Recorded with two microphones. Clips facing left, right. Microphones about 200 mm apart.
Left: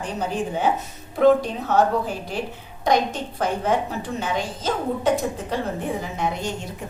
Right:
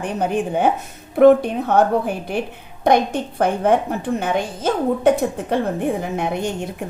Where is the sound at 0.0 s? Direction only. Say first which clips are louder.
Right 5 dB; 60° right (ahead or behind).